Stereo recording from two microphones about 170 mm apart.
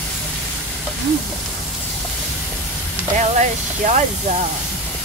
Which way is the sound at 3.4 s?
45° right (ahead or behind).